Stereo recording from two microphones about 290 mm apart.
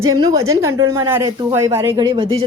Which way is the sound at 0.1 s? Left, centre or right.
Centre.